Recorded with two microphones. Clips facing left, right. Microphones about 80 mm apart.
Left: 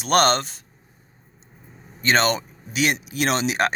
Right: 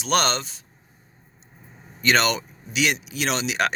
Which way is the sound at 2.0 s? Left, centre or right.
Left.